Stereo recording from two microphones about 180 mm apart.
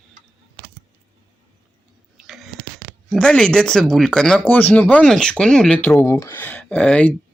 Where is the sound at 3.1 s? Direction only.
5° left (ahead or behind).